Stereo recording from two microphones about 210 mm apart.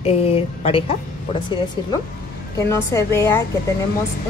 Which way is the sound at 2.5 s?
15° left (ahead or behind).